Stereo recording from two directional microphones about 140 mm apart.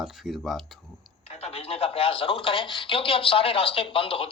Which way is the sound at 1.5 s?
45° left (ahead or behind).